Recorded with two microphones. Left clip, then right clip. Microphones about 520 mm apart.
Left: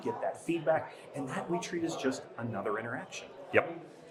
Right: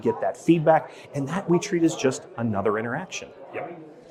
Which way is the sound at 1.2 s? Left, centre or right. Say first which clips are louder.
Right 11 dB; right.